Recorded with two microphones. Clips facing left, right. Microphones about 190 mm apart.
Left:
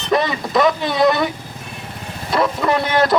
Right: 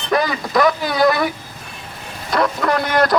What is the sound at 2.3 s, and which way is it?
Speech, centre (ahead or behind).